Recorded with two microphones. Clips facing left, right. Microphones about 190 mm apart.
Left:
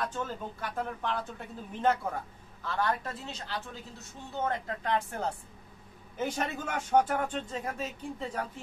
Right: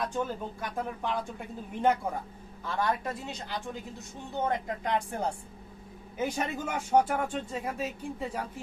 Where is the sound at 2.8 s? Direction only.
15° right (ahead or behind).